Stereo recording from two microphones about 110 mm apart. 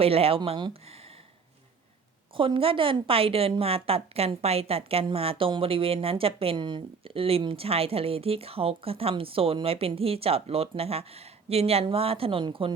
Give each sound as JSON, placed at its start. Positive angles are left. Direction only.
{"t": 0.0, "sound": "a woman's voice", "side_deg": -60}
{"t": 2.3, "sound": "a woman's voice", "side_deg": -55}